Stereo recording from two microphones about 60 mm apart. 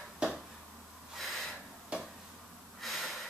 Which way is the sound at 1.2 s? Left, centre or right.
Centre.